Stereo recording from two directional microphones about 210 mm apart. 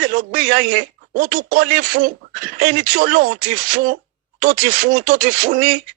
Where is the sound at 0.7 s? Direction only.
40° right (ahead or behind).